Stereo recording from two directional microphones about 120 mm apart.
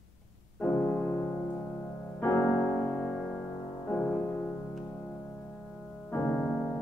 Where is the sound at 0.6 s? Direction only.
15° left (ahead or behind).